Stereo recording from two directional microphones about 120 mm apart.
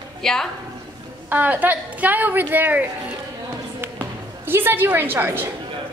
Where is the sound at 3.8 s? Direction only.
20° right (ahead or behind).